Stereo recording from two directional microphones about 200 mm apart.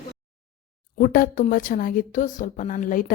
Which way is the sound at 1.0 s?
45° left (ahead or behind).